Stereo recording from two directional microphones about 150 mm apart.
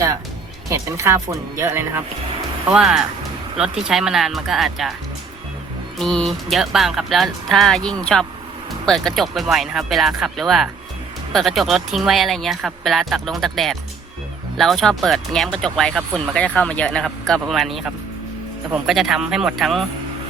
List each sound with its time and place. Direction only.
0.7 s speech: 20° right (ahead or behind)
2.6 s speech: 5° right (ahead or behind)
6.0 s speech: centre (ahead or behind)